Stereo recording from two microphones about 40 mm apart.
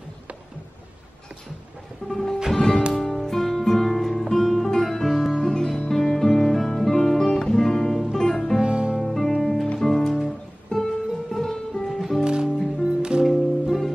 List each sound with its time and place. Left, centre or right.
2.5 s music: centre
2.9 s music: centre
5.9 s guitar: centre
8.2 s music: centre
8.6 s music: right
9.0 s music: centre
10.7 s music: centre
11.3 s music: centre
11.9 s music: centre
12.4 s music: centre
12.8 s music: right
13.2 s music: centre